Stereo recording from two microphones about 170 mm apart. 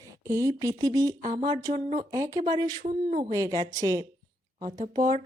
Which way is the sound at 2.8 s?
45° right (ahead or behind).